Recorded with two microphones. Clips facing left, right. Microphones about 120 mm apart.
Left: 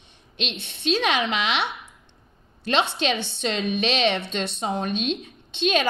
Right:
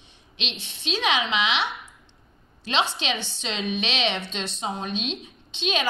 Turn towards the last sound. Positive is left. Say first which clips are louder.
# left 4 dB
turn(degrees=50)  # may be behind; listen again after turning